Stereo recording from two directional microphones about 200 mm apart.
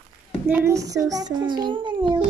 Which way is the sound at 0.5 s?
15° right (ahead or behind).